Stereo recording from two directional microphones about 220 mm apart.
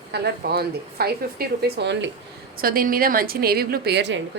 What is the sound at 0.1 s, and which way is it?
A woman's voice, 45° right (ahead or behind).